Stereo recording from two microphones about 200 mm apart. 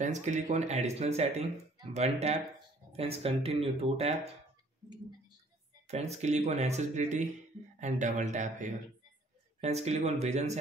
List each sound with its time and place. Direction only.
0.0 s speech: 35° right (ahead or behind)
5.9 s speech: 35° right (ahead or behind)